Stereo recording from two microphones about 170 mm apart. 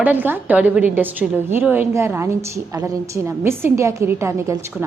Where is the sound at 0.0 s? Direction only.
10° right (ahead or behind).